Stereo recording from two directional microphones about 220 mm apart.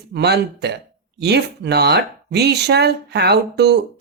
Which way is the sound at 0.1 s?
50° right (ahead or behind).